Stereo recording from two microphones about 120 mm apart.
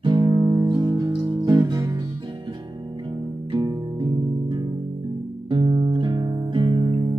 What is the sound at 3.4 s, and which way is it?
Music, 40° right (ahead or behind).